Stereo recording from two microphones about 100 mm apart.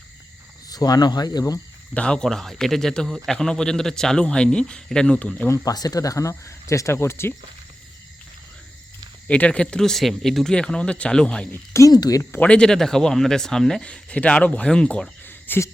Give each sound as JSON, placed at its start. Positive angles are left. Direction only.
{"t": 0.7, "sound": "speech", "side_deg": 40}
{"t": 1.9, "sound": "speech", "side_deg": 10}
{"t": 5.5, "sound": "speech", "side_deg": 40}
{"t": 9.2, "sound": "speech", "side_deg": 10}
{"t": 11.5, "sound": "speech", "side_deg": 30}
{"t": 11.9, "sound": "speech", "side_deg": 40}
{"t": 12.4, "sound": "speech", "side_deg": 10}